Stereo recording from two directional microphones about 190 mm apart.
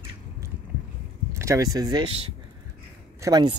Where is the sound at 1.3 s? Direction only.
15° right (ahead or behind).